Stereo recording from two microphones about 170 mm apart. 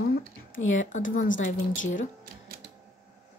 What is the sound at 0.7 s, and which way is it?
Speech, 50° left (ahead or behind).